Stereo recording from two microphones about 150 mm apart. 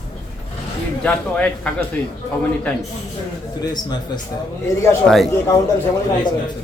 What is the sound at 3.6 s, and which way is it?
Speech, 30° left (ahead or behind).